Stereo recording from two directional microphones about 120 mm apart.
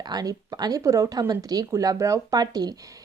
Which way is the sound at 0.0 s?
35° right (ahead or behind).